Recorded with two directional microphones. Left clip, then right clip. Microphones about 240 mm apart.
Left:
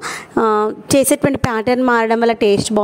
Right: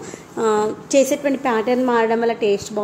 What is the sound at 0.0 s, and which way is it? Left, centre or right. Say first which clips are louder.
A woman's voice: left 5 dB; left.